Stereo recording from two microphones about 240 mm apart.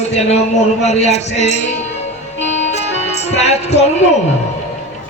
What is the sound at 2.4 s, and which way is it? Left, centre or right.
Music, left.